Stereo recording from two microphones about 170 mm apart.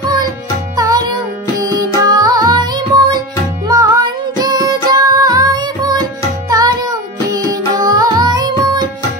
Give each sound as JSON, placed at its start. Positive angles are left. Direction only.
{"t": 0.7, "sound": "music", "side_deg": -20}